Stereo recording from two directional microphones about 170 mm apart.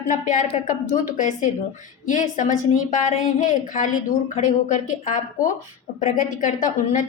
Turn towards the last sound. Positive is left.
turn(degrees=50)  # may be behind; listen again after turning